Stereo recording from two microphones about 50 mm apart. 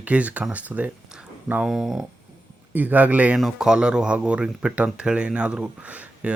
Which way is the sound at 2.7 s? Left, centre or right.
Right.